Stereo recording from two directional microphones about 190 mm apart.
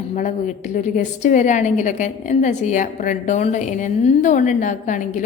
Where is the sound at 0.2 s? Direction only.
40° left (ahead or behind).